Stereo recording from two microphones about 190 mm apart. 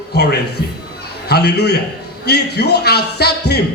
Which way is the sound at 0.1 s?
60° left (ahead or behind).